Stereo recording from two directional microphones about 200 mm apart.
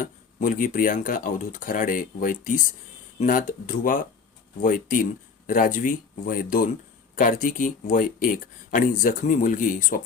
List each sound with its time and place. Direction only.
0.0 s speech: 45° left (ahead or behind)